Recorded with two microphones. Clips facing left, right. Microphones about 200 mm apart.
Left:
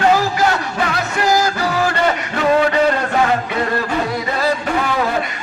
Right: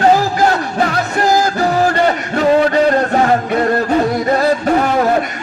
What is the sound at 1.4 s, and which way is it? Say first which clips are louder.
Music: right 4 dB; 50° right (ahead or behind).